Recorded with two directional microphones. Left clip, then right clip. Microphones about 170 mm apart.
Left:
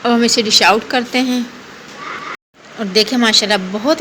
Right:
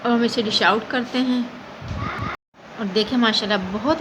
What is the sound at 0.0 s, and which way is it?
Speech, 20° left (ahead or behind).